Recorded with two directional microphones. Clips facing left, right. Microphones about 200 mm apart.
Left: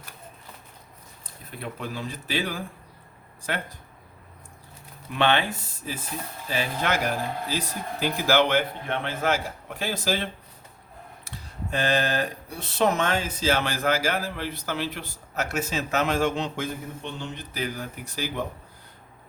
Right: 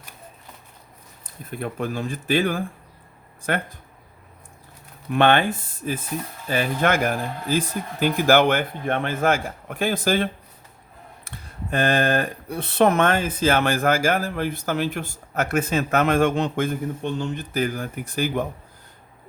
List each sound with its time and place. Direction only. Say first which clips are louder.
1.5 s speech: right 7 dB; 50° right (ahead or behind)
5.1 s speech: right 5 dB; 50° right (ahead or behind)
11.3 s speech: right 3 dB; 55° right (ahead or behind)